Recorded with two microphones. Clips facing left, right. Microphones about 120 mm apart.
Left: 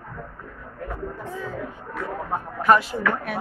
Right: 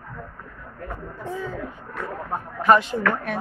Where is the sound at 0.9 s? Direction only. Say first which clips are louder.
Even; centre (ahead or behind).